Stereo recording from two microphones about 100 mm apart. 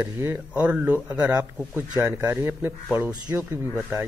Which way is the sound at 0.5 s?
10° right (ahead or behind).